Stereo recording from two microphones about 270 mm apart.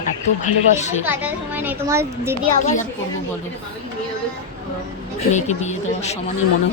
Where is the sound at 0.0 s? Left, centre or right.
Left.